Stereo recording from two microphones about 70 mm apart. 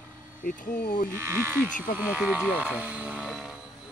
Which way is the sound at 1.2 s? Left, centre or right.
Right.